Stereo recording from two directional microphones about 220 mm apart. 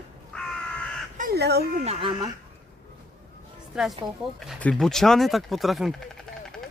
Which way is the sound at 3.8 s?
Centre (ahead or behind).